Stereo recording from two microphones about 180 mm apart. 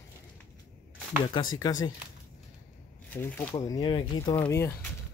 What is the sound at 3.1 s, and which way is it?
Speech, 10° left (ahead or behind).